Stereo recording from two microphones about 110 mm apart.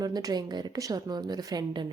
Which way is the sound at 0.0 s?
35° right (ahead or behind).